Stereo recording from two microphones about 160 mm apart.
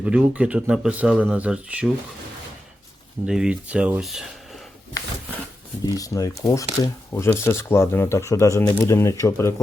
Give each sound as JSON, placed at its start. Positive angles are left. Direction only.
{"t": 0.0, "sound": "speech", "side_deg": -10}
{"t": 3.2, "sound": "speech", "side_deg": -5}
{"t": 5.8, "sound": "speech", "side_deg": 20}